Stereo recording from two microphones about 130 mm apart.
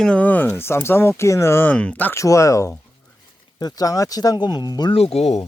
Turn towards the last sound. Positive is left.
turn(degrees=55)  # may be behind; listen again after turning